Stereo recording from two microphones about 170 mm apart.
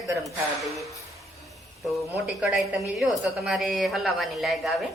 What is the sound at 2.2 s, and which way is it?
Speech, 5° right (ahead or behind).